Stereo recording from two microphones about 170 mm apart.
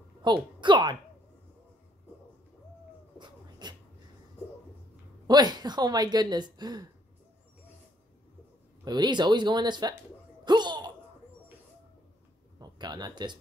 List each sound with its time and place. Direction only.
0.2 s a woman's voice: 30° right (ahead or behind)
3.2 s a sound: 25° right (ahead or behind)
5.2 s a woman's voice: 25° right (ahead or behind)
8.8 s a woman's voice: 25° right (ahead or behind)
10.4 s a sound: 25° right (ahead or behind)
12.5 s speech: 25° right (ahead or behind)